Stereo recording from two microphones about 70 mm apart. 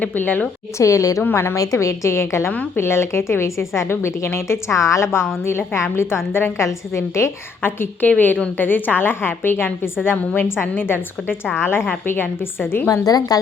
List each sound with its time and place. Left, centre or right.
0.0 s a woman's voice: left
0.8 s a woman's voice: left
1.2 s a woman's voice: left
1.5 s a woman's voice: left
7.6 s a woman's voice: left
12.9 s a woman's voice: left